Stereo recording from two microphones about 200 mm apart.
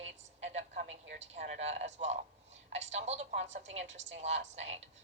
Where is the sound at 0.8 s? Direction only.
55° right (ahead or behind).